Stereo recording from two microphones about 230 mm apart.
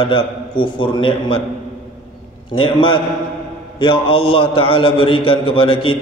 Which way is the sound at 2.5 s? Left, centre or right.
Left.